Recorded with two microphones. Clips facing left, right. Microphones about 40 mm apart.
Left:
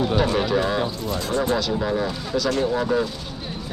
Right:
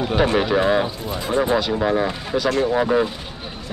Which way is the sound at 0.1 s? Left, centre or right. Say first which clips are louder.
Right 2 dB; right.